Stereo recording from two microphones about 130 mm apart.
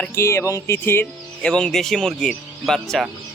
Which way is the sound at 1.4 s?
5° left (ahead or behind).